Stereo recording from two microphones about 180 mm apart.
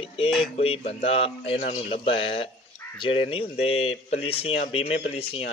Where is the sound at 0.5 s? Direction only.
35° left (ahead or behind).